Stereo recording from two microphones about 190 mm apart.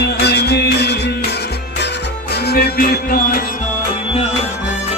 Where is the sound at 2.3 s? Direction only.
55° left (ahead or behind).